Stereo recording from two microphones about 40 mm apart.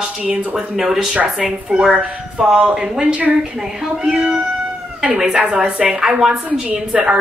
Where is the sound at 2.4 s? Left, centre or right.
Centre.